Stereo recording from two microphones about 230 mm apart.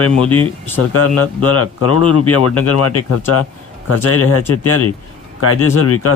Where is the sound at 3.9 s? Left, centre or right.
Left.